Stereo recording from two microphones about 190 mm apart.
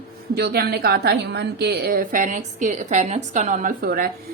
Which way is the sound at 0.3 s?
55° right (ahead or behind).